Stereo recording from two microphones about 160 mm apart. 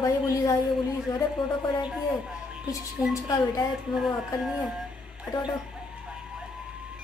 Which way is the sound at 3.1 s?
20° left (ahead or behind).